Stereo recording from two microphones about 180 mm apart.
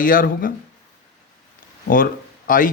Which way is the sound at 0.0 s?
50° left (ahead or behind).